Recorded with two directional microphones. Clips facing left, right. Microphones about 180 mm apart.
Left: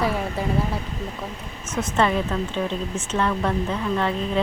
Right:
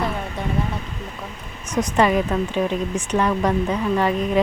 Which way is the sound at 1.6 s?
15° right (ahead or behind).